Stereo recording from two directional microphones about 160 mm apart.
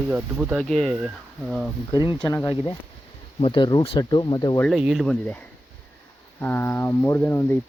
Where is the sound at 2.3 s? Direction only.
20° left (ahead or behind).